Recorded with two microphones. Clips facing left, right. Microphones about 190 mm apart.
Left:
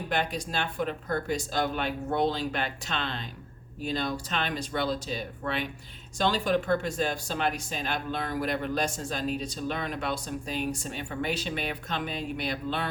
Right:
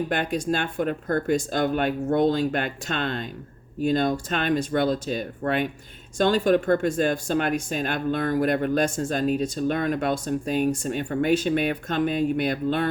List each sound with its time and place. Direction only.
0.1 s speech: 50° right (ahead or behind)